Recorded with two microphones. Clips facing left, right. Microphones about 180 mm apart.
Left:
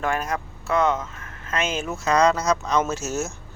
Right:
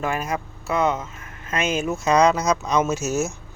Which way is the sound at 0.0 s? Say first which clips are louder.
Even; 5° right (ahead or behind).